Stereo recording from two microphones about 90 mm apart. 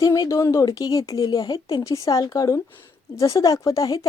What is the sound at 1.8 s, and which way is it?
Speech, 35° left (ahead or behind).